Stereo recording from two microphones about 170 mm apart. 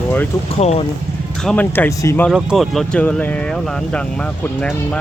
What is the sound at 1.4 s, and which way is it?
Speech, 5° left (ahead or behind).